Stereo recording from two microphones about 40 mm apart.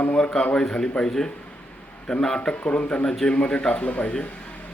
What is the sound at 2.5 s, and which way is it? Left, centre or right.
A man's voice, left.